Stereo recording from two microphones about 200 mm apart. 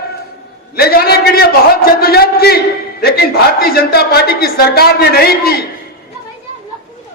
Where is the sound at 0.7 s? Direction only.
50° left (ahead or behind).